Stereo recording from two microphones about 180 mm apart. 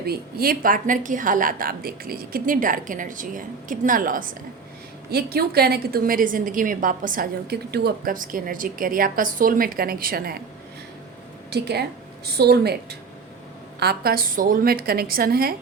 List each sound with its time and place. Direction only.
0.0 s a woman's voice: 60° right (ahead or behind)
5.1 s a woman's voice: 60° right (ahead or behind)
11.5 s a woman's voice: 65° right (ahead or behind)